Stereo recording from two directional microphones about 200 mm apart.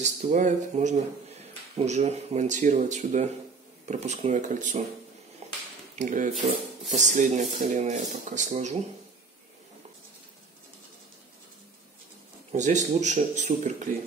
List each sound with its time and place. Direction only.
0.0 s speech: 40° right (ahead or behind)
5.4 s a sound: 30° right (ahead or behind)
5.9 s speech: 40° right (ahead or behind)
12.5 s speech: 35° right (ahead or behind)